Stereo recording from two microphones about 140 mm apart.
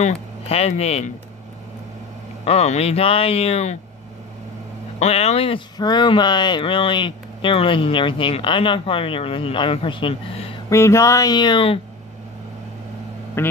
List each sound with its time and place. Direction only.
0.0 s a man's voice: 50° left (ahead or behind)
2.4 s a man's voice: 50° left (ahead or behind)
4.9 s a man's voice: 50° left (ahead or behind)
5.8 s speech: 30° left (ahead or behind)
10.7 s speech: 20° left (ahead or behind); by 11.8 s 40° left (ahead or behind)
13.4 s a man's voice: 15° left (ahead or behind)